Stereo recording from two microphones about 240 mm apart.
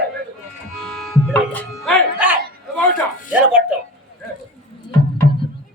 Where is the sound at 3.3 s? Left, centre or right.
Centre.